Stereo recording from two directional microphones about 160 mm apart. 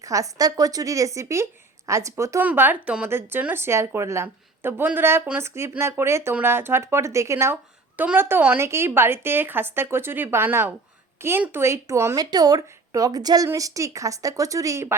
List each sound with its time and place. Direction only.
0.0 s speech: 20° right (ahead or behind)